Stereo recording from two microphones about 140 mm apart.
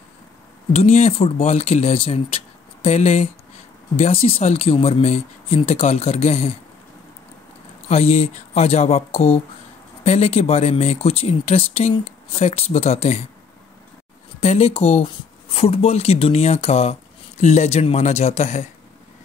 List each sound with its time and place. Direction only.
0.7 s speech: 50° left (ahead or behind)
7.9 s speech: 50° left (ahead or behind)
14.4 s speech: 50° left (ahead or behind)